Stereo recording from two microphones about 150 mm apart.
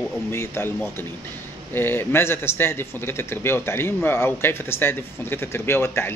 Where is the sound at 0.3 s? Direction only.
15° left (ahead or behind).